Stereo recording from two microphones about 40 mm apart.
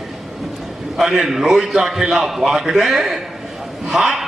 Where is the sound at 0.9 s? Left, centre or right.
Centre.